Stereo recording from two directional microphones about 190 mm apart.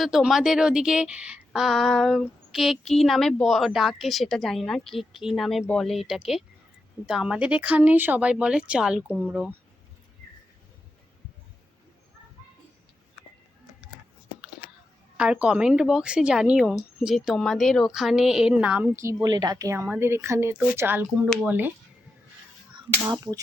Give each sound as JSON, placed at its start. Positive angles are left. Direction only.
{"t": 0.0, "sound": "a woman's voice", "side_deg": 0}
{"t": 15.2, "sound": "a woman's voice", "side_deg": -5}